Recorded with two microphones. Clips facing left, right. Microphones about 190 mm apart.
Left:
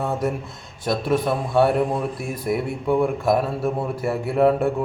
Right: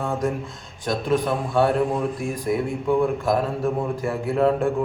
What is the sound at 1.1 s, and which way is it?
Speech, 10° left (ahead or behind).